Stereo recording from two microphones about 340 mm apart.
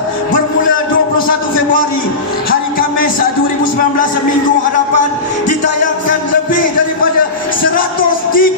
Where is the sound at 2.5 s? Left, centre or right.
Left.